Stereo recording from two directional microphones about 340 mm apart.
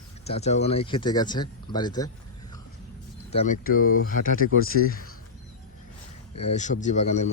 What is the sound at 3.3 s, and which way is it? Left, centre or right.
Speech, left.